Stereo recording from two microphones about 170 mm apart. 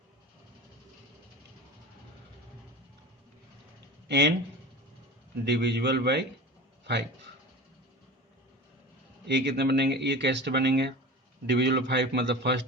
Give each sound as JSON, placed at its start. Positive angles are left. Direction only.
{"t": 4.1, "sound": "speech", "side_deg": -85}
{"t": 5.5, "sound": "speech", "side_deg": -80}
{"t": 9.2, "sound": "speech", "side_deg": -80}